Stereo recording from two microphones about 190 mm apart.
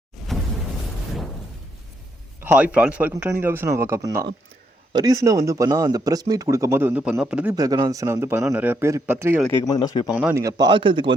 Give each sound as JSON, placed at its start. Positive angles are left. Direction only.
{"t": 0.2, "sound": "a sound", "side_deg": 0}
{"t": 2.4, "sound": "speech", "side_deg": -10}
{"t": 7.5, "sound": "speech", "side_deg": -20}
{"t": 9.5, "sound": "speech", "side_deg": 20}
{"t": 10.1, "sound": "speech", "side_deg": -5}
{"t": 10.4, "sound": "a man's voice", "side_deg": -25}